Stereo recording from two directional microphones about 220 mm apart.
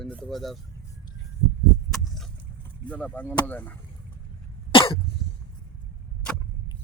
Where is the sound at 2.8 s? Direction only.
5° left (ahead or behind).